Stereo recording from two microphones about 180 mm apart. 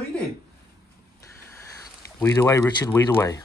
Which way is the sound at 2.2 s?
15° left (ahead or behind).